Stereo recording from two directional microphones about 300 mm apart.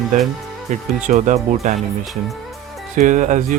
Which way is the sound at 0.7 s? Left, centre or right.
Right.